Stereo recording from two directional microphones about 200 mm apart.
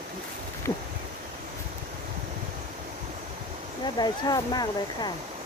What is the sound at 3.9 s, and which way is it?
Speech, 20° left (ahead or behind).